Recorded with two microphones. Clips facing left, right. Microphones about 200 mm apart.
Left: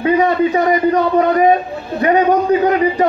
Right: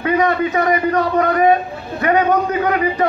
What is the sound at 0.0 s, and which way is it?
Speech, 30° left (ahead or behind).